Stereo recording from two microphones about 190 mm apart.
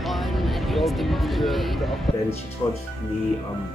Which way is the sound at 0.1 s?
Centre (ahead or behind).